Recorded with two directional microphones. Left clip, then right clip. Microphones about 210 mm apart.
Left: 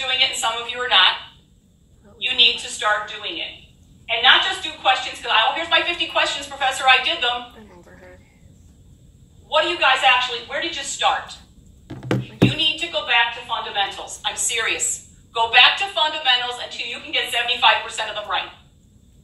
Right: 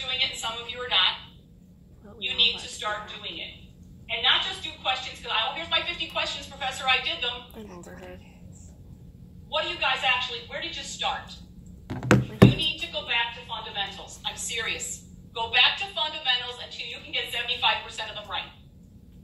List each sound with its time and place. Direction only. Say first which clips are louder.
0.0 s a sound: left 8 dB; 55° left (ahead or behind)
2.1 s a woman's voice: left 7 dB; 55° left (ahead or behind)
9.5 s a woman's voice: left 9 dB; 55° left (ahead or behind)
12.4 s a woman's voice: left 6 dB; 55° left (ahead or behind)